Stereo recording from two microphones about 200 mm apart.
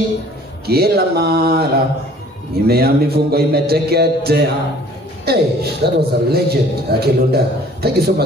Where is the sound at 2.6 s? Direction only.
50° right (ahead or behind).